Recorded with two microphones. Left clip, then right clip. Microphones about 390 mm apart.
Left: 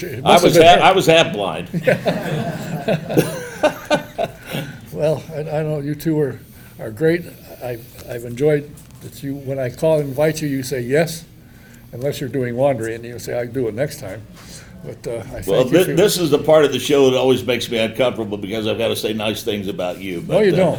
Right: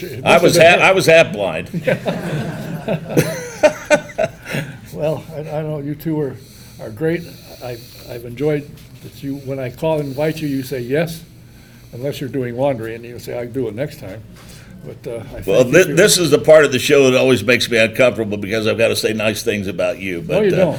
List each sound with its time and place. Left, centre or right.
0.3 s speech: right
1.7 s speech: centre
3.2 s a sound: right
4.9 s speech: centre
15.5 s speech: right
20.3 s speech: centre